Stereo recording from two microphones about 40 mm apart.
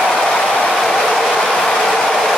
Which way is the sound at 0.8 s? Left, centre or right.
Centre.